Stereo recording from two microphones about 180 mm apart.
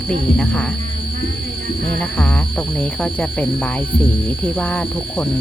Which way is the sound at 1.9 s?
5° left (ahead or behind).